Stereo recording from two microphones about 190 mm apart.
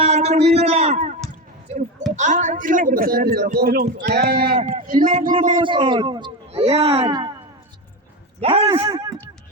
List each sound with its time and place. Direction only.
0.0 s a sound: 35° right (ahead or behind)
2.1 s a man's voice: 40° right (ahead or behind)
5.6 s speech: 25° right (ahead or behind)
8.4 s speech: 30° right (ahead or behind)